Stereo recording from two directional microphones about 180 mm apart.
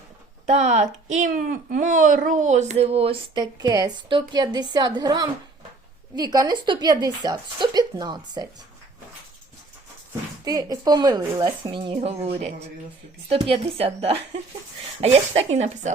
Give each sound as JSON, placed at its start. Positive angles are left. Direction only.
{"t": 0.4, "sound": "a woman's voice", "side_deg": -40}
{"t": 10.4, "sound": "a woman's voice", "side_deg": -20}